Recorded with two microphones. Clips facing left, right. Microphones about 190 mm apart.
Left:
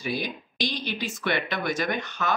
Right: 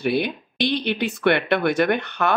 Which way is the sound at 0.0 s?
65° right (ahead or behind).